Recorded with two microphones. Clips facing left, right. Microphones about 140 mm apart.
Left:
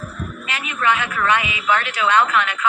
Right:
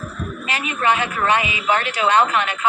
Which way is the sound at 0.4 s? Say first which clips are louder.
Right 1 dB; 35° right (ahead or behind).